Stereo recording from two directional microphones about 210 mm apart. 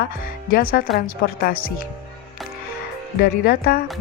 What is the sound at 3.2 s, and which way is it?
Speech, 45° left (ahead or behind).